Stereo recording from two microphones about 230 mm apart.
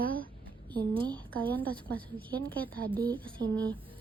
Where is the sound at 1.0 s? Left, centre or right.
Centre.